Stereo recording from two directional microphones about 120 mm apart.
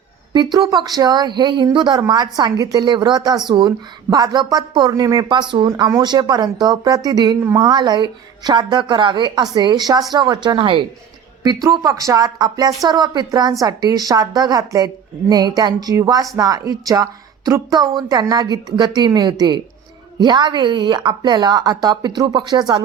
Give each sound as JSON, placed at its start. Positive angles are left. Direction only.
{"t": 0.3, "sound": "a woman's voice", "side_deg": -35}
{"t": 11.4, "sound": "a woman's voice", "side_deg": -30}